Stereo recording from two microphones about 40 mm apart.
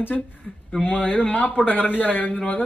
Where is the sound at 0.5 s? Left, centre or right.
Centre.